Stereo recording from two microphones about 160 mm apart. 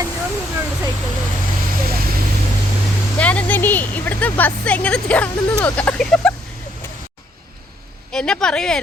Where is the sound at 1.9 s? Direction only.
70° right (ahead or behind).